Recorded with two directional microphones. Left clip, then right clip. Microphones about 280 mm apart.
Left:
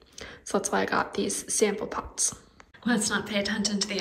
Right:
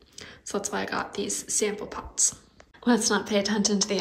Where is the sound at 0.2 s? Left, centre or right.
Centre.